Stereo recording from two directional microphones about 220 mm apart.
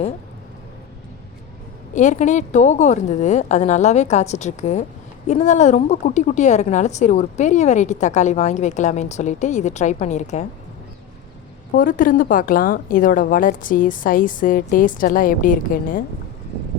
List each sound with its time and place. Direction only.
2.0 s a woman's voice: 35° left (ahead or behind)
11.7 s a woman's voice: 40° left (ahead or behind)